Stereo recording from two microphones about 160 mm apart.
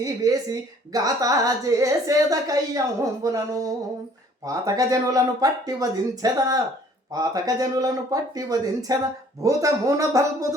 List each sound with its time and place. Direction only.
0.0 s speech: 20° right (ahead or behind)